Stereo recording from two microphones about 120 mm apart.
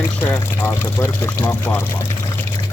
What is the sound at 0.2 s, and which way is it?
Speech, 20° left (ahead or behind).